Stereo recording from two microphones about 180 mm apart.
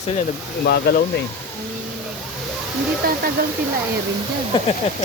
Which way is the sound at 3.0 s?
55° right (ahead or behind).